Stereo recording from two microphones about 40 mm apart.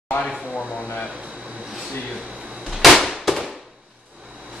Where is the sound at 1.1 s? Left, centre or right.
Right.